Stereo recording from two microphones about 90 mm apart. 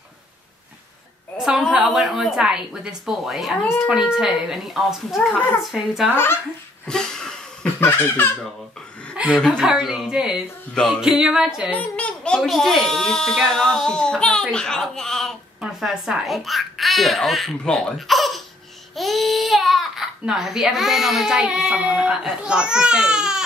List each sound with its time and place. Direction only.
1.4 s speech: 5° right (ahead or behind)
6.9 s a sound: 5° left (ahead or behind)
7.8 s speech: 25° left (ahead or behind)
9.1 s chuckle: 15° right (ahead or behind)
9.7 s speech: 5° right (ahead or behind)
10.7 s speech: 5° left (ahead or behind)
11.0 s speech: 5° right (ahead or behind)
11.7 s a sound: 15° left (ahead or behind)
12.4 s speech: centre (ahead or behind)
15.6 s speech: 10° right (ahead or behind)